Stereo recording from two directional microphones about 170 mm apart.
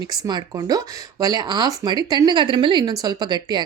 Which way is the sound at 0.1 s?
25° right (ahead or behind).